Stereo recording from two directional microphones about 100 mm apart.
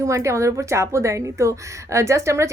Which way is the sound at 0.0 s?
30° right (ahead or behind).